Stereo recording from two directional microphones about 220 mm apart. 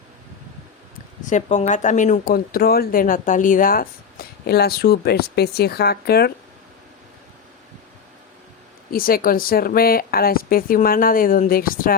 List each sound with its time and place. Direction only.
1.2 s speech: 35° left (ahead or behind)
8.9 s speech: 40° left (ahead or behind)